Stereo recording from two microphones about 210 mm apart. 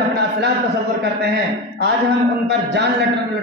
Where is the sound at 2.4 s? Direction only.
55° right (ahead or behind).